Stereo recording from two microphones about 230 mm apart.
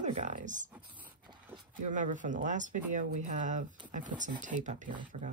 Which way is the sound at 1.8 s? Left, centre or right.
Right.